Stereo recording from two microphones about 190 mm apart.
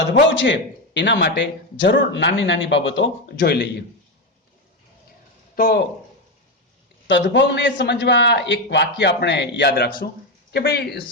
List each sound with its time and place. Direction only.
0.1 s speech: 70° left (ahead or behind)
5.5 s speech: 55° left (ahead or behind)
7.1 s a man's voice: 70° left (ahead or behind)